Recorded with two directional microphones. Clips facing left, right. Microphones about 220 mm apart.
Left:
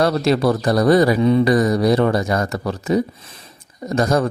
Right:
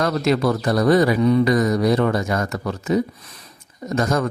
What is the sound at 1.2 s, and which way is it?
Speech, 25° left (ahead or behind).